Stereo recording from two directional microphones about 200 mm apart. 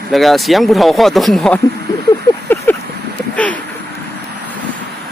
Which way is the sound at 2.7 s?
10° left (ahead or behind).